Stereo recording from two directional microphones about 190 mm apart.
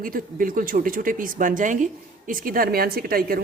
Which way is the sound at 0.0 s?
45° right (ahead or behind).